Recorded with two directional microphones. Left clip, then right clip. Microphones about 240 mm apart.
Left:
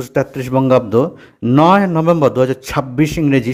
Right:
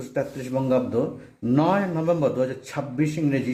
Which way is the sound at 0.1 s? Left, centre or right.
Left.